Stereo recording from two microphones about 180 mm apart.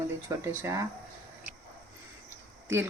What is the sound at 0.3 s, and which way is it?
Speech, 15° right (ahead or behind).